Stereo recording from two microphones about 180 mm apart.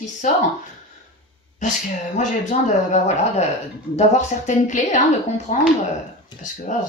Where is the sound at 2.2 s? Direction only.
40° left (ahead or behind).